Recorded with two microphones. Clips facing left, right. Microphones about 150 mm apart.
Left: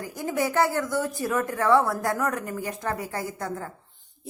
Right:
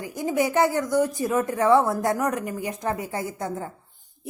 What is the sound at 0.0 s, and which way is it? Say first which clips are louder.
A woman's voice: right 3 dB; 20° right (ahead or behind).